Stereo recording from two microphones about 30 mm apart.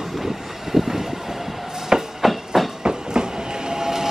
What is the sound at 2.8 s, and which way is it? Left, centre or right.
Train, right.